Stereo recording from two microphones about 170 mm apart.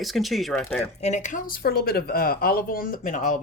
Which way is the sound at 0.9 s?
40° left (ahead or behind).